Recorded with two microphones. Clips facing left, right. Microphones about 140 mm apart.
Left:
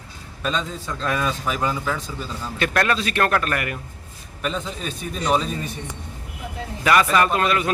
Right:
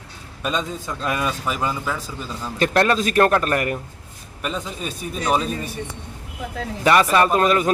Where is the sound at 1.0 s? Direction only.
10° right (ahead or behind).